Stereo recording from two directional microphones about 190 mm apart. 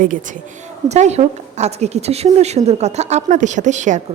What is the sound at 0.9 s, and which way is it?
A woman's voice, 35° right (ahead or behind).